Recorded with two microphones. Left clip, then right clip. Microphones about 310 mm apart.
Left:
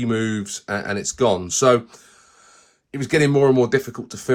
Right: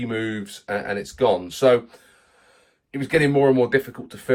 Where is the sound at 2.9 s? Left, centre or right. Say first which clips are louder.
Left 1 dB; left.